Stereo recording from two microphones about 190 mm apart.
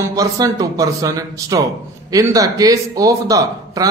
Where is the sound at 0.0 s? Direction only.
15° right (ahead or behind).